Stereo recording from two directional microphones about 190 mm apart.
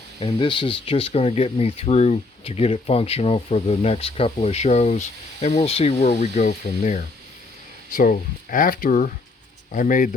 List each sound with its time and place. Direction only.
0.2 s speech: 25° left (ahead or behind)
7.9 s speech: 45° left (ahead or behind)